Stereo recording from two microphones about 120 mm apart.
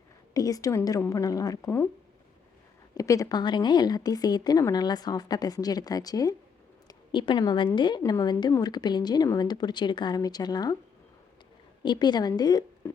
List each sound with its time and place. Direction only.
0.3 s speech: 30° left (ahead or behind)
2.9 s a woman's voice: 30° left (ahead or behind)
11.8 s a woman's voice: 40° left (ahead or behind)
12.8 s music: 20° left (ahead or behind)